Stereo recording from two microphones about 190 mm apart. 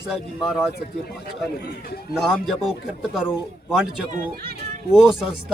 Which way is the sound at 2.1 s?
Centre (ahead or behind).